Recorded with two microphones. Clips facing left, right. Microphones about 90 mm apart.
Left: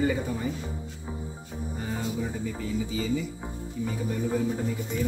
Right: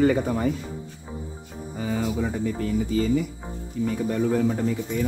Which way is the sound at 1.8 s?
90° right.